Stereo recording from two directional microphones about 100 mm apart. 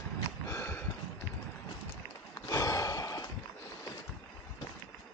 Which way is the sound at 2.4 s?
35° left (ahead or behind).